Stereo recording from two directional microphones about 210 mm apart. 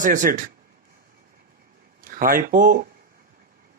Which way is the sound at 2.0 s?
40° right (ahead or behind).